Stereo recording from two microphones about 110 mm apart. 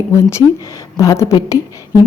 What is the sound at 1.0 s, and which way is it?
Speech, 30° left (ahead or behind).